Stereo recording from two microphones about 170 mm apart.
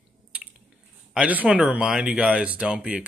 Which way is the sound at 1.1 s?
10° right (ahead or behind).